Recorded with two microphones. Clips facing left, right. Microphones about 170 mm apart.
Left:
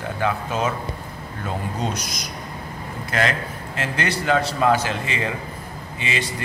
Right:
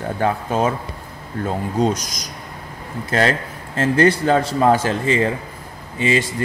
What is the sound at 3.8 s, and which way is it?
A man's voice, 45° right (ahead or behind).